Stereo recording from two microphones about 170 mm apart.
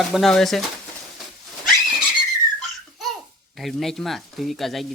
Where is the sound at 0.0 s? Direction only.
Centre (ahead or behind).